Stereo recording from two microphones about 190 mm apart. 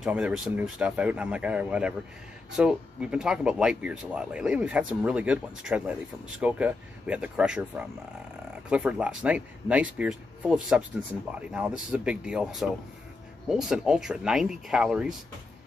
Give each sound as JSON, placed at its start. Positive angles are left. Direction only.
{"t": 0.0, "sound": "speech", "side_deg": -5}